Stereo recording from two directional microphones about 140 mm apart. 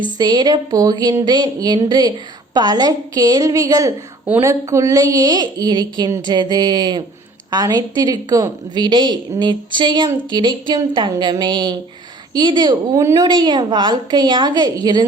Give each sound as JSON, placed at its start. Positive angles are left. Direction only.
{"t": 0.2, "sound": "a woman's voice", "side_deg": -30}
{"t": 13.0, "sound": "a woman's voice", "side_deg": -20}
{"t": 13.2, "sound": "a woman's voice", "side_deg": -30}